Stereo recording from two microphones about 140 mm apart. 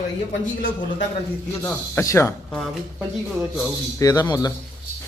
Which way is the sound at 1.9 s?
20° left (ahead or behind).